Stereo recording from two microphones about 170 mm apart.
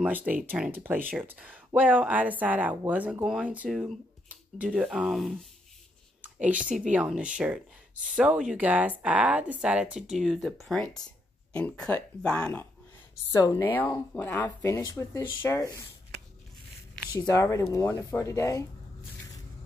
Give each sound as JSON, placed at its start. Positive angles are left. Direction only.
{"t": 0.0, "sound": "speech", "side_deg": -10}
{"t": 7.9, "sound": "speech", "side_deg": -50}
{"t": 8.2, "sound": "speech", "side_deg": -5}
{"t": 17.0, "sound": "a sound", "side_deg": 5}
{"t": 17.3, "sound": "speech", "side_deg": 20}